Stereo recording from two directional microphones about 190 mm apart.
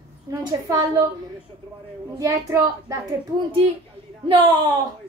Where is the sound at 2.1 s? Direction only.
20° right (ahead or behind).